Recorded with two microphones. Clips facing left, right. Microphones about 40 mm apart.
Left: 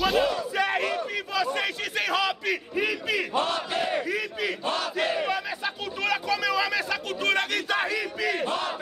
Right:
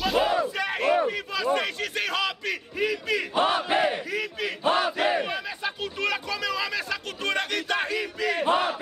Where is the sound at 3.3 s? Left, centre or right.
Right.